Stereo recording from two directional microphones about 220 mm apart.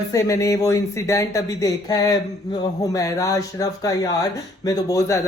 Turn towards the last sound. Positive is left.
turn(degrees=15)  # may be behind; listen again after turning